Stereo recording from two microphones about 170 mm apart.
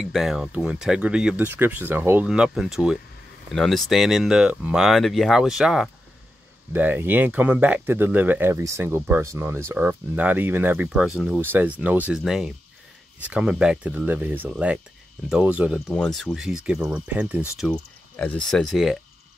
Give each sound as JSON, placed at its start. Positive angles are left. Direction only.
{"t": 0.0, "sound": "speech", "side_deg": 0}
{"t": 15.9, "sound": "speech", "side_deg": 5}